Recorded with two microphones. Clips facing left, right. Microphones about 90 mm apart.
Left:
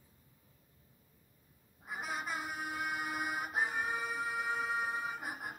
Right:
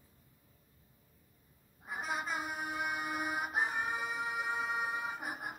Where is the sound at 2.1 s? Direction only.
15° right (ahead or behind).